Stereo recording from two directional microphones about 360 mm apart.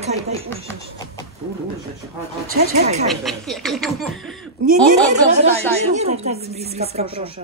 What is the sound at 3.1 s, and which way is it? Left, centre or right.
Speech, centre.